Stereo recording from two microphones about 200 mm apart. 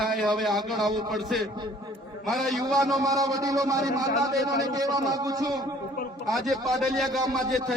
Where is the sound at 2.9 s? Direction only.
15° right (ahead or behind).